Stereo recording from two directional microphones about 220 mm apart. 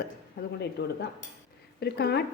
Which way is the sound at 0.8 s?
50° left (ahead or behind).